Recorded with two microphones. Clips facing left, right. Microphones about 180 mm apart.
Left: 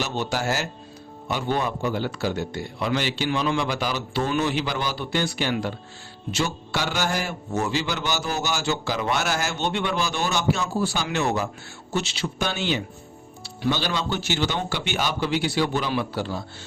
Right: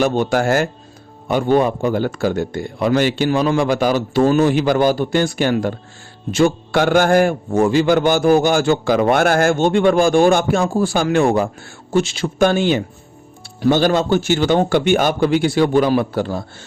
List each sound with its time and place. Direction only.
0.0 s a man's voice: 50° right (ahead or behind)